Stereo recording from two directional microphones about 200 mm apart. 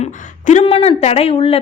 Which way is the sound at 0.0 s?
35° left (ahead or behind).